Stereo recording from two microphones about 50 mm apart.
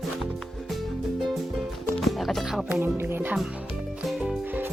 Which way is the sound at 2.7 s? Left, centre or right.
Right.